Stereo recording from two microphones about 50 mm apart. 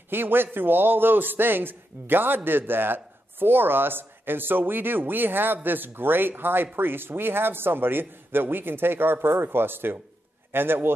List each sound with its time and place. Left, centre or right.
0.1 s a man's voice: right